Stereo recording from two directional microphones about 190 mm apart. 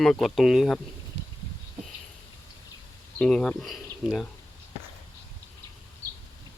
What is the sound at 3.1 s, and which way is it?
Speech, 5° left (ahead or behind).